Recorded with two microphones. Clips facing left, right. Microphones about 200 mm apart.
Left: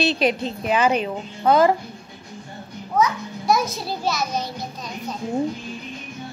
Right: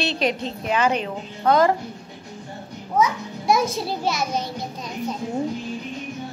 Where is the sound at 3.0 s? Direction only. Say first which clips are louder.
Even; 25° right (ahead or behind).